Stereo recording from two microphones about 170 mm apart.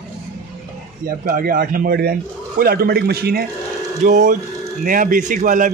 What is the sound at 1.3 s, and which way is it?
Speech, 60° right (ahead or behind).